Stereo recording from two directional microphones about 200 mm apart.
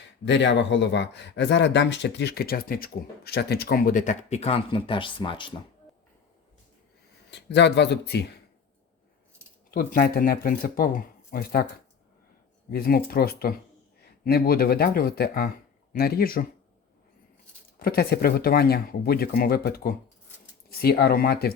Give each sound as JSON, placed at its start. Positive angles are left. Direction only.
{"t": 0.3, "sound": "speech", "side_deg": 65}
{"t": 7.3, "sound": "speech", "side_deg": 60}
{"t": 9.7, "sound": "speech", "side_deg": 45}
{"t": 12.7, "sound": "speech", "side_deg": 50}
{"t": 17.7, "sound": "speech", "side_deg": 50}